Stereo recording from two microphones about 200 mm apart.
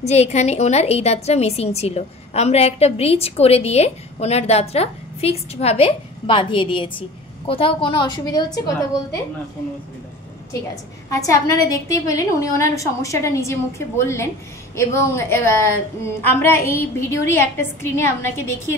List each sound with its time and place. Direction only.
0.0 s a woman's voice: 35° left (ahead or behind)
11.1 s a woman's voice: 15° left (ahead or behind)